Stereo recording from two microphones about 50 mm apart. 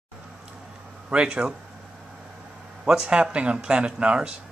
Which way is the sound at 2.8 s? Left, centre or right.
Centre.